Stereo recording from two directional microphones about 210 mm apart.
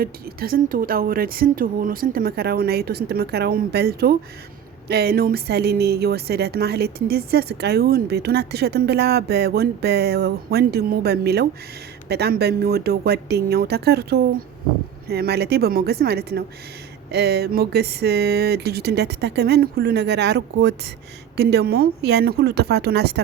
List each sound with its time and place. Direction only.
0.0 s a woman's voice: 45° right (ahead or behind)